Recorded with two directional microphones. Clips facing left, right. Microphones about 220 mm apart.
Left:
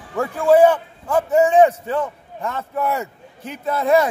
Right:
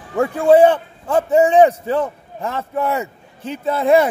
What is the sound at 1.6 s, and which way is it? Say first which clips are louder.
A man's voice: right 2 dB; 30° right (ahead or behind).